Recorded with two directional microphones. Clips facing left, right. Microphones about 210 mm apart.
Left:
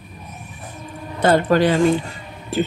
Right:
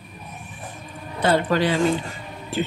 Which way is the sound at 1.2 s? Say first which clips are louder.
Left 4 dB; 50° left (ahead or behind).